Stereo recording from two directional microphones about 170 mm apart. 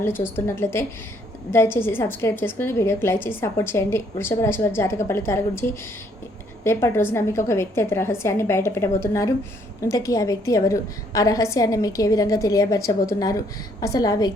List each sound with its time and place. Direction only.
0.0 s a woman's voice: 15° left (ahead or behind)